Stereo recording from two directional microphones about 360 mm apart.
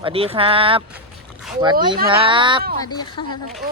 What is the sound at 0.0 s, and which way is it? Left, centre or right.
Speech, centre.